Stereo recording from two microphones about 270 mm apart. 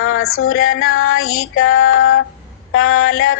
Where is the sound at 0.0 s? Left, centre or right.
Left.